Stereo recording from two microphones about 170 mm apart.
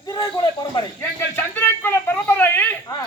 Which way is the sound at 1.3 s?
10° left (ahead or behind).